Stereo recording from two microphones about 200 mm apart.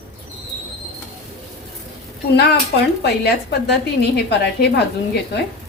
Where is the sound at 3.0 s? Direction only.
55° left (ahead or behind).